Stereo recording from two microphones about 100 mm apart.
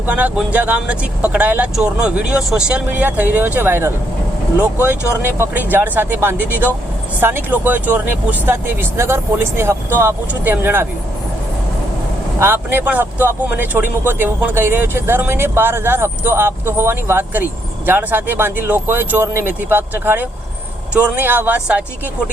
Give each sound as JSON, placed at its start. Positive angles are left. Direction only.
{"t": 0.0, "sound": "speech", "side_deg": -15}
{"t": 12.4, "sound": "speech", "side_deg": -20}